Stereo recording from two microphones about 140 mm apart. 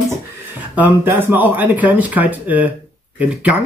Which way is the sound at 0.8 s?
10° right (ahead or behind).